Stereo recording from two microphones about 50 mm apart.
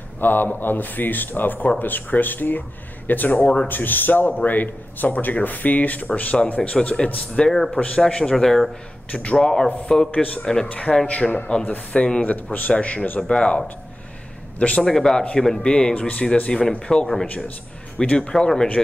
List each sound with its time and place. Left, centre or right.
0.2 s a man's voice: left
7.5 s a man's voice: centre
9.1 s a man's voice: left
9.4 s a man's voice: centre
10.1 s a man's voice: left
10.4 s a man's voice: centre
10.7 s a man's voice: left
13.3 s a man's voice: left
14.8 s a man's voice: centre
18.0 s a man's voice: left
18.3 s a man's voice: centre